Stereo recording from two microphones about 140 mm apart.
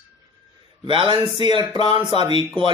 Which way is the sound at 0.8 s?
35° right (ahead or behind).